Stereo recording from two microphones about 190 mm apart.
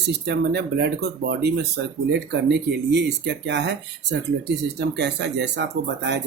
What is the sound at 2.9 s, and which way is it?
Speech, 65° right (ahead or behind).